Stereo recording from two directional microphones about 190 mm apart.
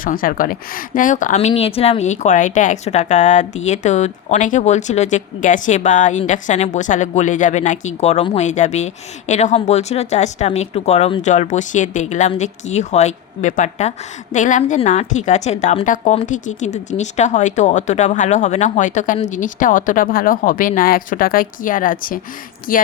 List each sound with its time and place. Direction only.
0.0 s a woman's voice: 45° left (ahead or behind)